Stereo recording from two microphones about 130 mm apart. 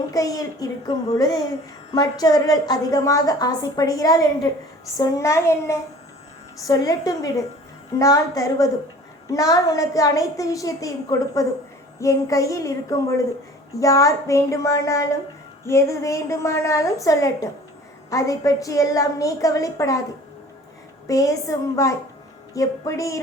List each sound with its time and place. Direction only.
0.1 s a woman's voice: 30° left (ahead or behind)
21.1 s a woman's voice: 25° left (ahead or behind)